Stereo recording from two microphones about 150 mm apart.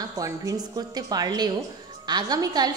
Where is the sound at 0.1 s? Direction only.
25° right (ahead or behind).